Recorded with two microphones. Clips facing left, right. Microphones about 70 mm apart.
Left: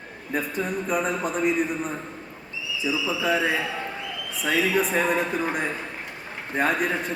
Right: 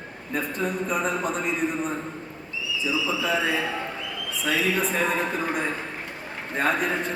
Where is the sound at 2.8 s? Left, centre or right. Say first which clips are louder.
Left 1 dB; centre.